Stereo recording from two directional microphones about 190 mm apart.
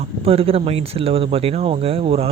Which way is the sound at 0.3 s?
30° right (ahead or behind).